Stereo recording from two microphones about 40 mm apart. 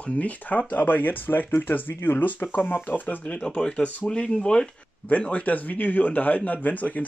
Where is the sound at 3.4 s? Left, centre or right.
Left.